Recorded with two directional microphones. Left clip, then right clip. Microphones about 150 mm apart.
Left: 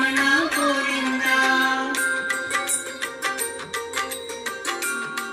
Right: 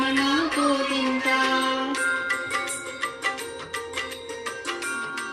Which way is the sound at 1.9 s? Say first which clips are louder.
Left 1 dB; 40° left (ahead or behind).